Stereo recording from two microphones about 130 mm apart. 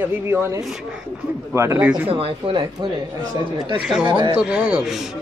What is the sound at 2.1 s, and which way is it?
Speech, 40° right (ahead or behind).